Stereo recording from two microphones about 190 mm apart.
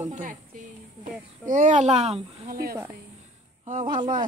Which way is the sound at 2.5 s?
50° right (ahead or behind).